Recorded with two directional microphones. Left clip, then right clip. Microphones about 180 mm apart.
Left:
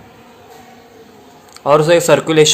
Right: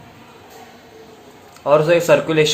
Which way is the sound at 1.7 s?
45° left (ahead or behind).